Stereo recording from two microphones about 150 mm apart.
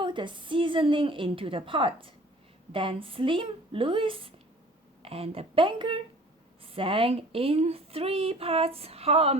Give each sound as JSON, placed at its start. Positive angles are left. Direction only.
{"t": 0.0, "sound": "speech", "side_deg": -30}